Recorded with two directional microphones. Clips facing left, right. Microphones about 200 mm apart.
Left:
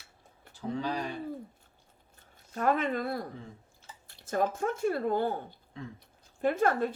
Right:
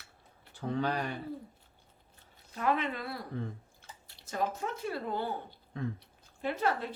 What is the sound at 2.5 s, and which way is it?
A woman's voice, 45° left (ahead or behind).